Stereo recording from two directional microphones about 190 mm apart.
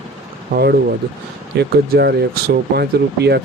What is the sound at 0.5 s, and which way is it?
Speech, 55° right (ahead or behind).